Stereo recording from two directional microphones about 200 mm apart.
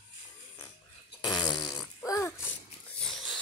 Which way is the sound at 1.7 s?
Centre (ahead or behind).